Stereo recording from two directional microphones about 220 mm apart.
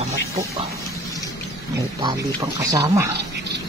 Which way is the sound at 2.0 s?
20° right (ahead or behind).